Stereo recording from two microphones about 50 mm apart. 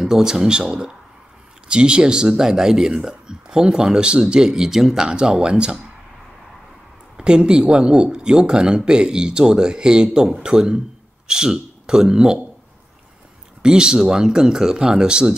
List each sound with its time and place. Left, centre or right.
0.0 s speech: centre
7.2 s speech: centre
13.6 s speech: centre